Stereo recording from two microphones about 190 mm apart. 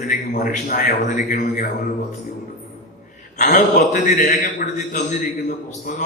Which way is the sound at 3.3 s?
40° left (ahead or behind).